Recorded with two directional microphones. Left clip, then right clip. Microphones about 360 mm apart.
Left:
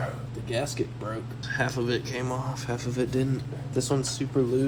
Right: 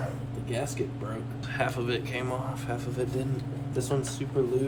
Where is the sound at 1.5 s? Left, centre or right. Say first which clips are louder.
Left 2 dB; centre.